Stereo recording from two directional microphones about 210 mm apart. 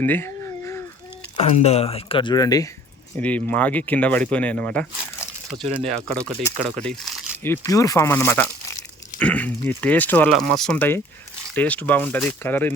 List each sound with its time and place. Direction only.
0.0 s a sound: 10° left (ahead or behind)
1.4 s speech: 30° left (ahead or behind)
3.2 s speech: 5° left (ahead or behind)
6.5 s speech: 15° left (ahead or behind)
6.8 s a sound: 5° left (ahead or behind)
7.5 s speech: 15° left (ahead or behind)